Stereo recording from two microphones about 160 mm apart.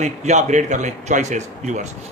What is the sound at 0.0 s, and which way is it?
Speech, 50° right (ahead or behind).